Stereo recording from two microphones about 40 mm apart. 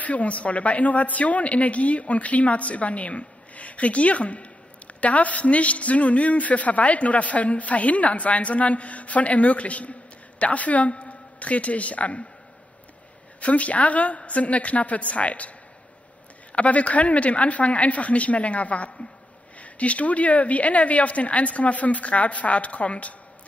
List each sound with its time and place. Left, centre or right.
0.0 s speech: left
13.4 s speech: left
16.5 s speech: left